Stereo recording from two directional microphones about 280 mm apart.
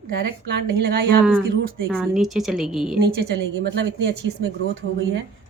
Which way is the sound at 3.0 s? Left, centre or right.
Right.